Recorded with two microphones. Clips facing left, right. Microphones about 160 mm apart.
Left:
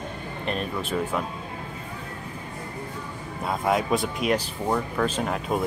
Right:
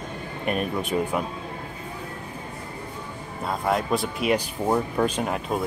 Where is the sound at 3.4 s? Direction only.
Centre (ahead or behind).